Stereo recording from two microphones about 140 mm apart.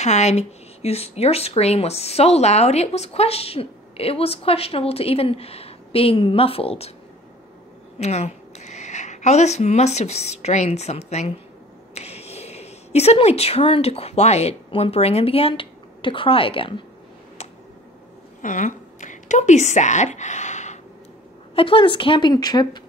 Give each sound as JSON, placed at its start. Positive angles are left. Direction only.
{"t": 0.0, "sound": "speech", "side_deg": 55}
{"t": 8.0, "sound": "speech", "side_deg": 50}
{"t": 18.4, "sound": "a woman's voice", "side_deg": 65}
{"t": 21.5, "sound": "a woman's voice", "side_deg": 40}